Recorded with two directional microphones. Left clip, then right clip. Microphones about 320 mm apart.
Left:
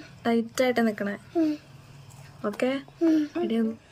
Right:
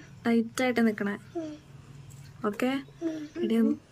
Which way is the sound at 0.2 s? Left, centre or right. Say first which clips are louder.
Left 3 dB; centre.